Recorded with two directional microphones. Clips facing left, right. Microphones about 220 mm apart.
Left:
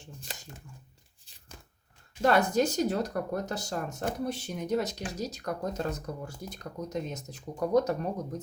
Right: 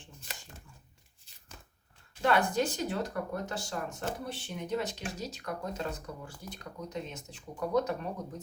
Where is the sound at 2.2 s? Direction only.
40° left (ahead or behind).